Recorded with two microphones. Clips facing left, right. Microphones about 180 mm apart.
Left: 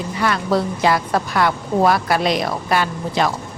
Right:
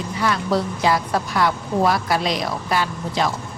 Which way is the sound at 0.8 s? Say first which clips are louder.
Left 2 dB; 60° left (ahead or behind).